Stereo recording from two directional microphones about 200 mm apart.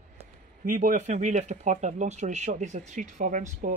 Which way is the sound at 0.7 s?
45° right (ahead or behind).